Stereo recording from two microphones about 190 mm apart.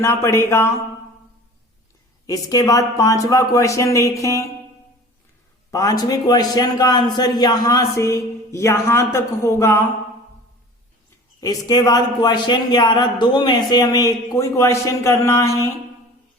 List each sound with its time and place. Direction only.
0.0 s a man's voice: 15° left (ahead or behind)
2.2 s a man's voice: 20° left (ahead or behind)
5.7 s a man's voice: 20° left (ahead or behind)
11.3 s a man's voice: 20° left (ahead or behind)